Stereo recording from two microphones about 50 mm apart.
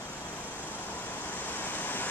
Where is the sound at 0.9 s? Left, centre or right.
Left.